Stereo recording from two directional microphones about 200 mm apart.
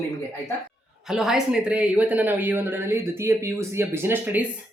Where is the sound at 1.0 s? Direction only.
Centre (ahead or behind).